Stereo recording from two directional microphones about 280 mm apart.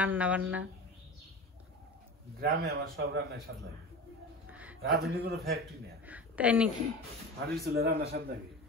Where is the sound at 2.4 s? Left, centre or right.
Right.